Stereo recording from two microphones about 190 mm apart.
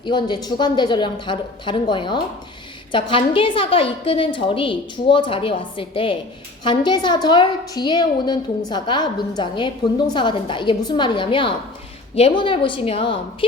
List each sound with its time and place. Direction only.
0.0 s a woman's voice: 25° left (ahead or behind)